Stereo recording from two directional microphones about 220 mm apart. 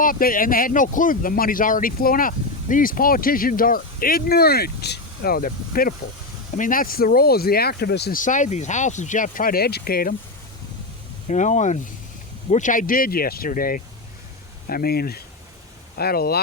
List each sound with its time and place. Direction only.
0.0 s speech: 40° left (ahead or behind)
11.3 s speech: 30° left (ahead or behind)